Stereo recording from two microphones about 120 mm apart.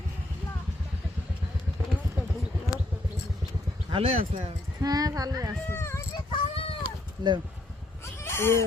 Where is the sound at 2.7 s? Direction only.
30° left (ahead or behind).